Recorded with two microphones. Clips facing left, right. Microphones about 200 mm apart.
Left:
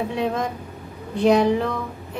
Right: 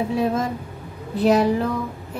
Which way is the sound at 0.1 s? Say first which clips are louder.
Right 2 dB; 5° right (ahead or behind).